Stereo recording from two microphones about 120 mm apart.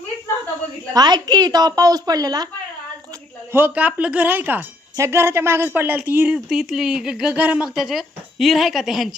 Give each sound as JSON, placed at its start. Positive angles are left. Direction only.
{"t": 0.9, "sound": "a woman's voice", "side_deg": -35}
{"t": 3.5, "sound": "speech", "side_deg": -15}
{"t": 6.5, "sound": "speech", "side_deg": -5}